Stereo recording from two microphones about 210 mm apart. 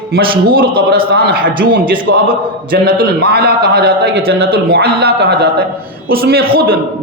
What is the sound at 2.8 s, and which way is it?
A man's voice, 50° right (ahead or behind).